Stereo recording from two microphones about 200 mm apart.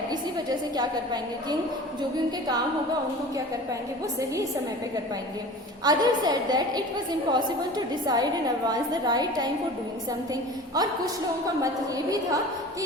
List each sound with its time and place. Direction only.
0.1 s a sound: 20° right (ahead or behind)
5.8 s a woman's voice: 20° right (ahead or behind)
10.8 s a woman's voice: 20° right (ahead or behind)